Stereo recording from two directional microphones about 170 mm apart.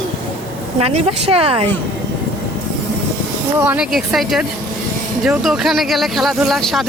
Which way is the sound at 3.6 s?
10° right (ahead or behind).